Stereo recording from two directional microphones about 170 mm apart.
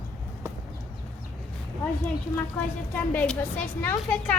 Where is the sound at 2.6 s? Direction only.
10° left (ahead or behind).